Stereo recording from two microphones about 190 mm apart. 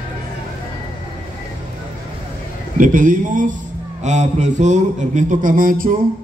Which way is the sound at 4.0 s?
40° right (ahead or behind).